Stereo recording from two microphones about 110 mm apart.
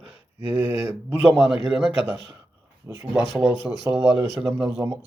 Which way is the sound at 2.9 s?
25° right (ahead or behind).